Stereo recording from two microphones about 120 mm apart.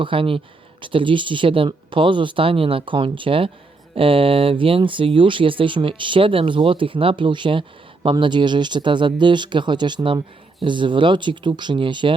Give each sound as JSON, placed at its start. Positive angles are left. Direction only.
{"t": 0.0, "sound": "speech", "side_deg": -45}